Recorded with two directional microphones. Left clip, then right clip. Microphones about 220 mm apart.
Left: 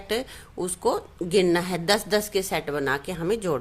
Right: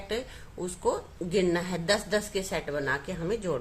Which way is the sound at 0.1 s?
45° left (ahead or behind).